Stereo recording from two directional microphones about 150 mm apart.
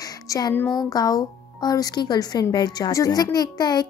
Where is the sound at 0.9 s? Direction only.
25° left (ahead or behind).